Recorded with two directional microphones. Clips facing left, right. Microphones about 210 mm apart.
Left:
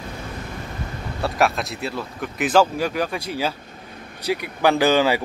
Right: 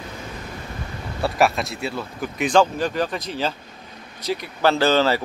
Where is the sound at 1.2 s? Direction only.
Centre (ahead or behind).